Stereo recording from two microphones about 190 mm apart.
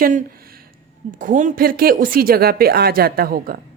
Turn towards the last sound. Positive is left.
turn(degrees=-50)  # may be behind; listen again after turning